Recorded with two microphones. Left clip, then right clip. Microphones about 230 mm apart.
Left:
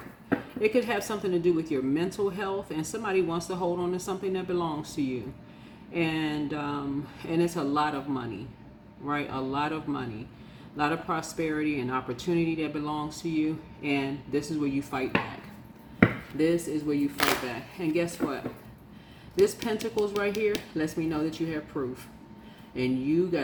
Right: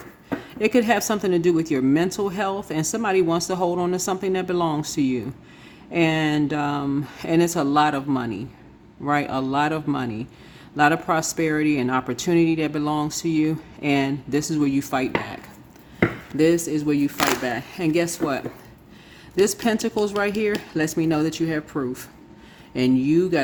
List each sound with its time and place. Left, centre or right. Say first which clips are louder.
0.6 s speech: right 8 dB; right
16.4 s speech: right 7 dB; right
19.6 s speech: right 6 dB; right